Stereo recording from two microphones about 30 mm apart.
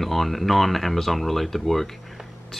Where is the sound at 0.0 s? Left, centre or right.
Centre.